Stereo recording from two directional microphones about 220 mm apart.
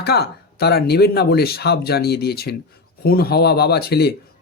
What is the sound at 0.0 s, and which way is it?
Speech, 45° left (ahead or behind).